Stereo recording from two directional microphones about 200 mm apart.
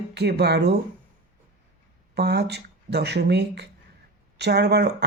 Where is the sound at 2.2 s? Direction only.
55° right (ahead or behind).